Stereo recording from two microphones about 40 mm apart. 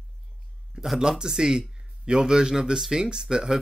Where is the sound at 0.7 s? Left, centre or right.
Right.